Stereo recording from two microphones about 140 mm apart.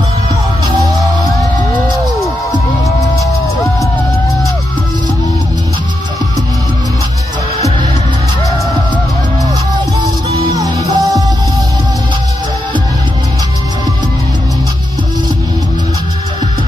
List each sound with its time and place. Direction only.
9.9 s music: 30° right (ahead or behind)